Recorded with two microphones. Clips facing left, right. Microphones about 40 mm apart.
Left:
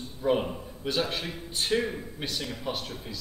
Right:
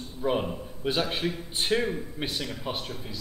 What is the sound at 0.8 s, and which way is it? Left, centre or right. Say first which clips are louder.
A man's voice: right 2 dB; centre.